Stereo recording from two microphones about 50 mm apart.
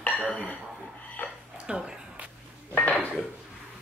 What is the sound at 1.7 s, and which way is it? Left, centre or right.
Speech, centre.